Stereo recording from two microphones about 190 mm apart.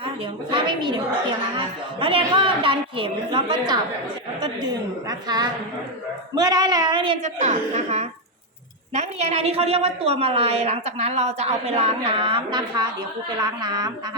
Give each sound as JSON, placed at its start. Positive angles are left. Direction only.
{"t": 0.5, "sound": "a woman's voice", "side_deg": -25}